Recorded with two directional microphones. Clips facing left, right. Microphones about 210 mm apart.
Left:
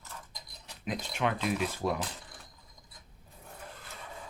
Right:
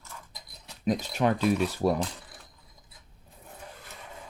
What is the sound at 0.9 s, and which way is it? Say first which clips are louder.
Speech: right 7 dB; 40° right (ahead or behind).